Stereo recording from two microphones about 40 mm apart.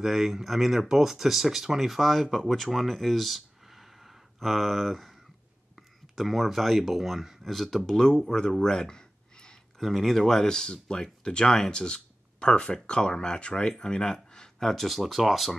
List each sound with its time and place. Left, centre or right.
0.0 s speech: centre
9.8 s speech: centre
14.6 s speech: centre